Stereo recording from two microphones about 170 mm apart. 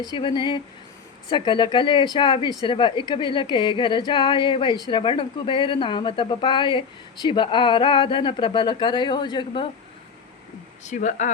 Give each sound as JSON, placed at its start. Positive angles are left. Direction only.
{"t": 0.1, "sound": "a woman's voice", "side_deg": 25}
{"t": 10.8, "sound": "speech", "side_deg": 45}